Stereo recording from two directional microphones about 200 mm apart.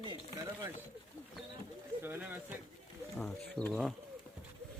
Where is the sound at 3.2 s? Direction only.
5° left (ahead or behind).